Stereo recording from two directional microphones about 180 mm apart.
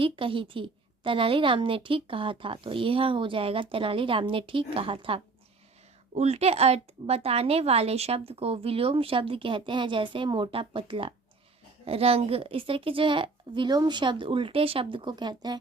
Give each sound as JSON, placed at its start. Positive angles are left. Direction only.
{"t": 0.0, "sound": "a woman's voice", "side_deg": -30}